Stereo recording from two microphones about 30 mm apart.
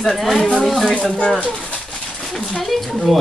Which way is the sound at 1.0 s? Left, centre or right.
Left.